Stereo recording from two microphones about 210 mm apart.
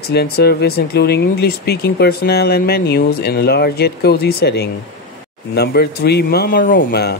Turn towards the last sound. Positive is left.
turn(degrees=50)  # may be behind; listen again after turning